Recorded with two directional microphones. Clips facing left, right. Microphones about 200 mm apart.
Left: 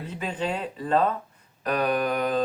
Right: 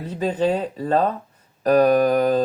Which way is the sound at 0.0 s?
40° right (ahead or behind).